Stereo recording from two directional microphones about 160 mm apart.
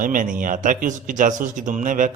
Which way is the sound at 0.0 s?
55° right (ahead or behind).